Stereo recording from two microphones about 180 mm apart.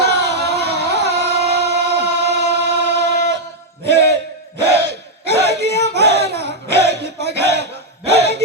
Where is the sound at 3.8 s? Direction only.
70° right (ahead or behind).